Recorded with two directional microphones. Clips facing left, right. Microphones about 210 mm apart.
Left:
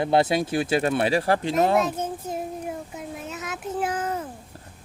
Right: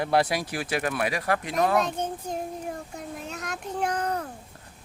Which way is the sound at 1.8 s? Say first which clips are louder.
Left 2 dB; 5° left (ahead or behind).